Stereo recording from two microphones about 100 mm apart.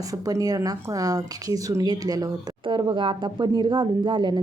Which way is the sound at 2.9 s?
55° right (ahead or behind).